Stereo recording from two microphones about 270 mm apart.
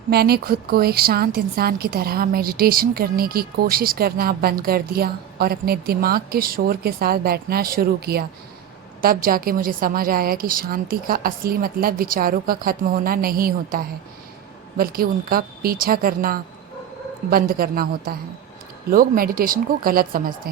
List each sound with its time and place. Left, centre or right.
0.1 s a woman's voice: right